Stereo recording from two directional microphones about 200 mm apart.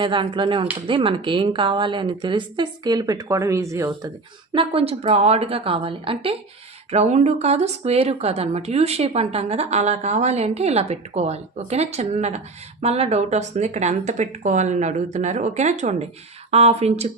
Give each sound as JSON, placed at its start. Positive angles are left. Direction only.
{"t": 0.0, "sound": "a woman's voice", "side_deg": -25}
{"t": 4.5, "sound": "a woman's voice", "side_deg": -30}